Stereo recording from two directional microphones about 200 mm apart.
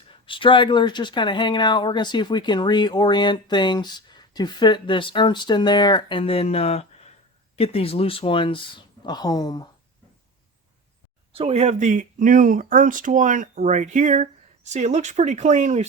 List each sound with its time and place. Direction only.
0.3 s speech: 25° left (ahead or behind)
11.3 s speech: 30° right (ahead or behind)